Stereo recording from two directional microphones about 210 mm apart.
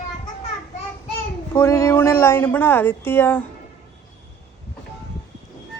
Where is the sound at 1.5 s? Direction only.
15° left (ahead or behind).